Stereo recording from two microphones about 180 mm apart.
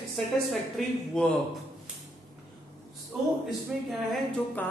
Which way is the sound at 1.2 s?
5° left (ahead or behind).